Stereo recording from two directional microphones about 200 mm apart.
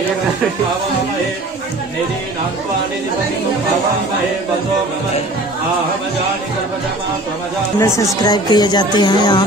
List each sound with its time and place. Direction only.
7.8 s speech: 15° left (ahead or behind)